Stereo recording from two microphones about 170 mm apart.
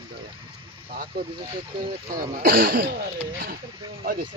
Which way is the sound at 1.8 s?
55° right (ahead or behind).